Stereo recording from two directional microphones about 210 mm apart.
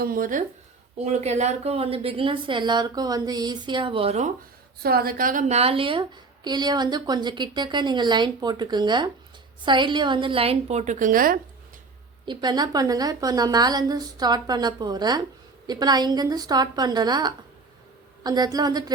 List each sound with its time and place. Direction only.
0.0 s a woman's voice: 40° right (ahead or behind)
4.8 s a woman's voice: 45° right (ahead or behind)
12.2 s a woman's voice: 20° right (ahead or behind)